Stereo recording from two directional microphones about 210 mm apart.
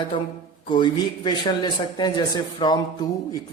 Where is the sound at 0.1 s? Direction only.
25° left (ahead or behind).